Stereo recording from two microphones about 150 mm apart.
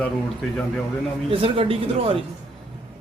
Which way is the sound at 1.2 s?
35° right (ahead or behind).